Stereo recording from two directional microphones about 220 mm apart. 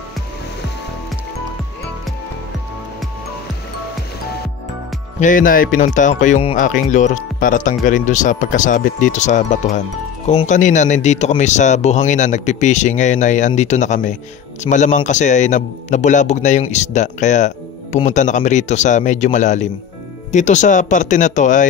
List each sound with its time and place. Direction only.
5.2 s speech: 35° left (ahead or behind)